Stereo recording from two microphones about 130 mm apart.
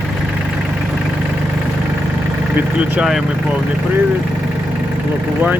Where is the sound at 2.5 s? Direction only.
10° right (ahead or behind).